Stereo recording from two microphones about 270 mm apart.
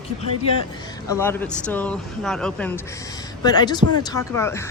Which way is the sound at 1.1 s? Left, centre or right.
Centre.